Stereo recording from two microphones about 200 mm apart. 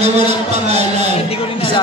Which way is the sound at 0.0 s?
35° right (ahead or behind).